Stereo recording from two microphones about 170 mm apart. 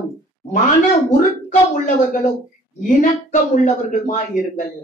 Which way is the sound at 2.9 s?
50° left (ahead or behind).